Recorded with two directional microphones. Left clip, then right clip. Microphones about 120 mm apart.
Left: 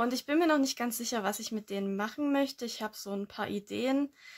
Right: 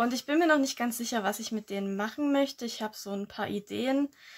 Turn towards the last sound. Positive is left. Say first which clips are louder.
# right 2 dB
turn(degrees=30)  # may be behind; listen again after turning